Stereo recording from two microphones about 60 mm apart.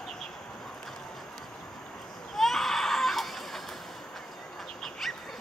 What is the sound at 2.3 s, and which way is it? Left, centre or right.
Baby cry, centre.